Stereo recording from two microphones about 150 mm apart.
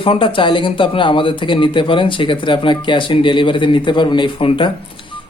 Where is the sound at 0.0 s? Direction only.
35° left (ahead or behind).